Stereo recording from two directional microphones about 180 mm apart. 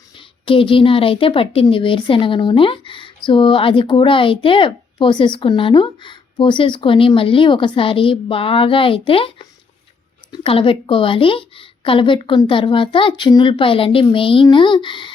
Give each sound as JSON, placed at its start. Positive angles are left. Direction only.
{"t": 0.2, "sound": "speech", "side_deg": 30}
{"t": 10.3, "sound": "speech", "side_deg": 30}